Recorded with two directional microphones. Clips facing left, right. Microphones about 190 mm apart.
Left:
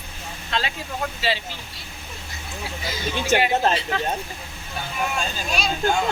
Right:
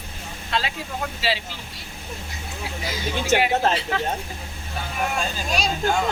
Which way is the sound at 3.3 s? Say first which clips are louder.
Even; 5° right (ahead or behind).